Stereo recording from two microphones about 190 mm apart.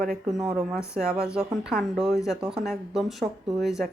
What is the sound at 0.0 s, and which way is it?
A woman's voice, centre (ahead or behind).